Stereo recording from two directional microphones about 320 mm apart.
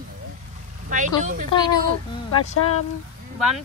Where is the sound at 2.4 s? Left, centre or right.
Left.